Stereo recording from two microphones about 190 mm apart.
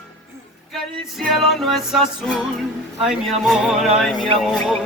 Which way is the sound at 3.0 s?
Centre (ahead or behind).